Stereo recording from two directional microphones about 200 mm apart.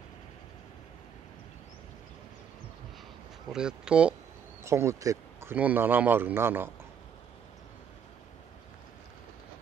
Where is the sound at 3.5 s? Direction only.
5° right (ahead or behind).